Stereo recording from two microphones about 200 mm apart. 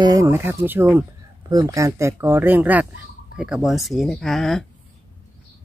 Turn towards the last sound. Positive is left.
turn(degrees=0)  # may be behind; listen again after turning